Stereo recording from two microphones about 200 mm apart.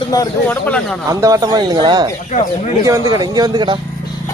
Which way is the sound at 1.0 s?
15° right (ahead or behind).